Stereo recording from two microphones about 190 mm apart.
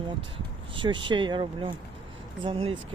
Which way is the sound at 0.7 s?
25° right (ahead or behind).